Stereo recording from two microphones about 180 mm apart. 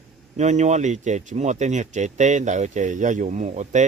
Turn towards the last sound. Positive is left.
turn(degrees=-40)  # may be behind; listen again after turning